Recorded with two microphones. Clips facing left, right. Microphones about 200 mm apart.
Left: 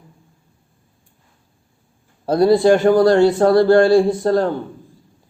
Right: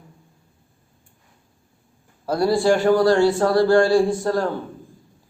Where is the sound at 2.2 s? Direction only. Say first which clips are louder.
Left 5 dB; 20° left (ahead or behind).